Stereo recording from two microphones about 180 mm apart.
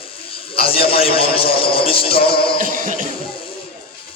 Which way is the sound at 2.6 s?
45° right (ahead or behind).